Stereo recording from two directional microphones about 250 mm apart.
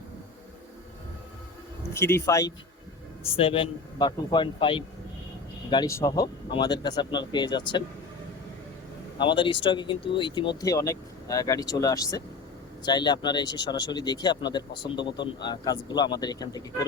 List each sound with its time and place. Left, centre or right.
1.8 s a man's voice: centre
9.1 s speech: centre